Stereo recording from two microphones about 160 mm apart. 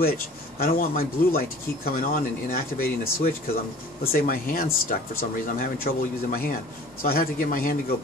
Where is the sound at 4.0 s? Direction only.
65° left (ahead or behind).